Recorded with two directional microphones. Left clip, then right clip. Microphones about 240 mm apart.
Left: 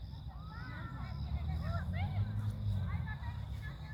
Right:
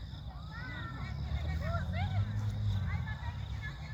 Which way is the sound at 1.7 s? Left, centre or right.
Right.